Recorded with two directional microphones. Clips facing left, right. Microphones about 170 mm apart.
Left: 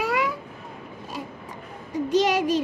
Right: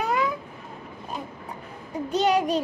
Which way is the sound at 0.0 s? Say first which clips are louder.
Even; 90° left.